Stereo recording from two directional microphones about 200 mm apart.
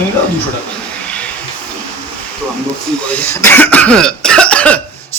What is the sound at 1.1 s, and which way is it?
Hiss, 5° left (ahead or behind).